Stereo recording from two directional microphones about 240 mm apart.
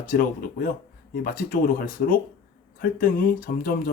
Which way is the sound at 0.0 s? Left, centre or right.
Left.